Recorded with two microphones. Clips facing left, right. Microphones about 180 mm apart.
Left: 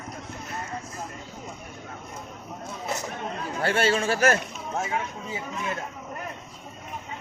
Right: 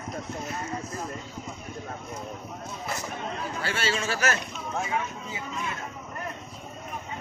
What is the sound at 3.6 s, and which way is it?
Speech, 55° left (ahead or behind).